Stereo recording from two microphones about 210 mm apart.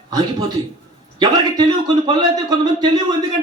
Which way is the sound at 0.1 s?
20° right (ahead or behind).